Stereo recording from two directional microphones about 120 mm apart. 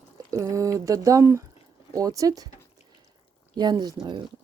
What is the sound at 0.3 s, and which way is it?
Speech, 25° right (ahead or behind).